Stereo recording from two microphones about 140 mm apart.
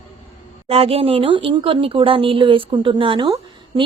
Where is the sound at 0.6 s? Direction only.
45° right (ahead or behind).